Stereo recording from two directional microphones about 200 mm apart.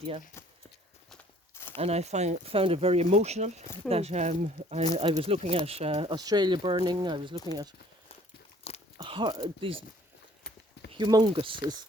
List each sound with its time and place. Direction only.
1.7 s speech: 30° right (ahead or behind)
9.0 s speech: 25° right (ahead or behind)
10.9 s speech: 20° right (ahead or behind)